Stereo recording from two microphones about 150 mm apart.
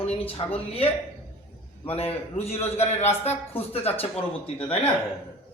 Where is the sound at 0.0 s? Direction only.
40° left (ahead or behind).